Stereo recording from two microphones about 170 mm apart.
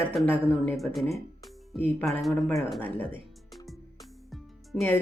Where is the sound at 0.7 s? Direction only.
Centre (ahead or behind).